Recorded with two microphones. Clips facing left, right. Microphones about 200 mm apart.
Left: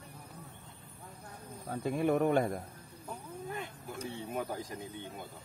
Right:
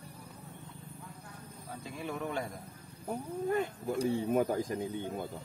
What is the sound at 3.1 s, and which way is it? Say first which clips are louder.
Speech: right 10 dB; 50° right (ahead or behind).